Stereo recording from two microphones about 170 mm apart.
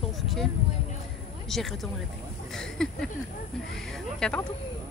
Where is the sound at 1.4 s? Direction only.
Centre (ahead or behind).